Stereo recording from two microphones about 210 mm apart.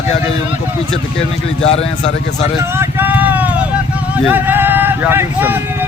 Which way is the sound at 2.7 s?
10° right (ahead or behind).